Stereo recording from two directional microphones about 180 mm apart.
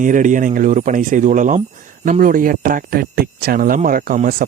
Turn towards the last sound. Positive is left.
turn(degrees=-50)  # may be behind; listen again after turning